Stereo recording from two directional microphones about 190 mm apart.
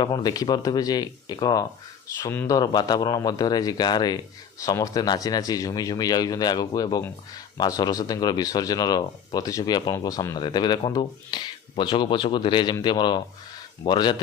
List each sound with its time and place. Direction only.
0.0 s speech: 20° left (ahead or behind)